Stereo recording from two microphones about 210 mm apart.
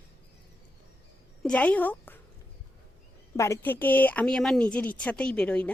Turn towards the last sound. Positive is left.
turn(degrees=5)  # may be behind; listen again after turning